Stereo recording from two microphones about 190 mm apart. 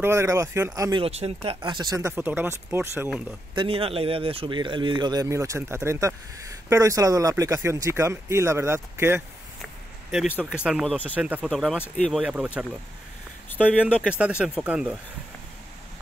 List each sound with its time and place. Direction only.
0.0 s speech: 15° right (ahead or behind)
1.0 s speech: 30° right (ahead or behind); by 3.1 s 15° right (ahead or behind)
3.5 s speech: 30° right (ahead or behind); by 12.2 s 5° left (ahead or behind)
12.2 s speech: 5° right (ahead or behind)
13.6 s speech: 5° right (ahead or behind)